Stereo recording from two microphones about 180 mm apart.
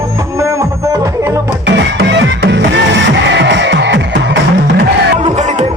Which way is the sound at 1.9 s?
80° right.